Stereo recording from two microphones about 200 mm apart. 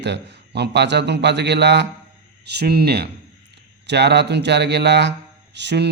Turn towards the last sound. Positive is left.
turn(degrees=-60)  # may be behind; listen again after turning